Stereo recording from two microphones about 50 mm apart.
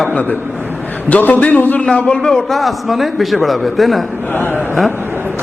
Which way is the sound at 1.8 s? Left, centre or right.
Left.